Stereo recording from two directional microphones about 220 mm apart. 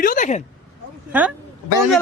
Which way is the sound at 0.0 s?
35° left (ahead or behind).